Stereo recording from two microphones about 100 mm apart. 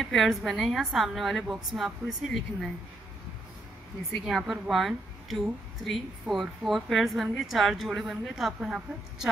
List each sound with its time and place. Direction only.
0.0 s a woman's voice: centre (ahead or behind)
4.3 s a woman's voice: centre (ahead or behind)